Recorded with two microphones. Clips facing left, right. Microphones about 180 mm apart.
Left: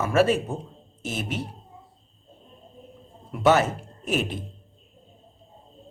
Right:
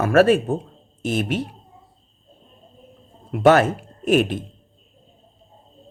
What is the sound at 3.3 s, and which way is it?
Speech, 60° right (ahead or behind).